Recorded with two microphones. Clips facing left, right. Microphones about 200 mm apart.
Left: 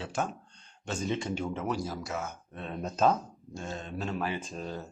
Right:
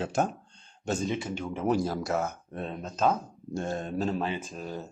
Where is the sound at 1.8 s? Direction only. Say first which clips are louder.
Right 7 dB; 60° right (ahead or behind).